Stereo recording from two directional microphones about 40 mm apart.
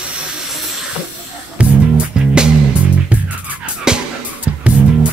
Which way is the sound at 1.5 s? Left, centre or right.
Right.